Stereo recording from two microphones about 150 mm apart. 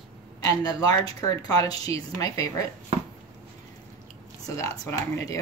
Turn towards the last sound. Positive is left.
turn(degrees=20)  # may be behind; listen again after turning